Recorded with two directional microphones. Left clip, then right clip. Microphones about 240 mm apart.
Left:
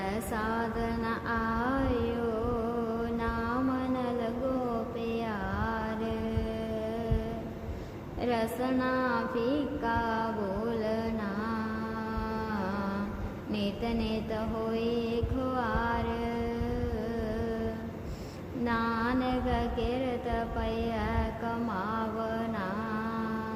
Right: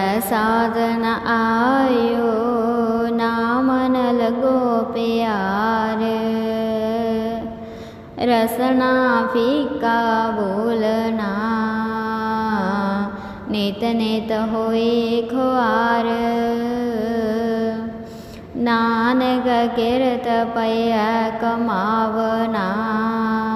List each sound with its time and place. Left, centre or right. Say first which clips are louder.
0.0 s mantra: right 14 dB; right
8.2 s music: right 13 dB; right
10.7 s mantra: right 13 dB; right
13.6 s music: right 12 dB; right
18.6 s music: right 13 dB; right